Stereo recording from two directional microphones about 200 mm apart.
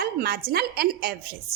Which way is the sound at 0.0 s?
50° right (ahead or behind).